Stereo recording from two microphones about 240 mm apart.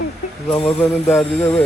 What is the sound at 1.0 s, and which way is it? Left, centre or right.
Speech, centre.